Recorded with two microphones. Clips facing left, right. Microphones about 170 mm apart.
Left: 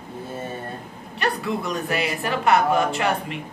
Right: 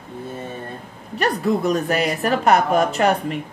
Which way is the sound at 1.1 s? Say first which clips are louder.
Right 5 dB; 40° right (ahead or behind).